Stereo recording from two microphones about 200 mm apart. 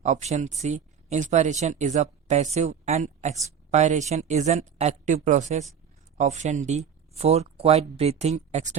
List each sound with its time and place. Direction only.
0.0 s speech: 35° right (ahead or behind)